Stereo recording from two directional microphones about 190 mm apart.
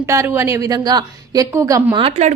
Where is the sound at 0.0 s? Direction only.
15° right (ahead or behind).